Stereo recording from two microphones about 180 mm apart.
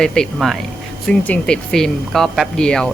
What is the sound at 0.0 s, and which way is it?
Speech, 5° left (ahead or behind).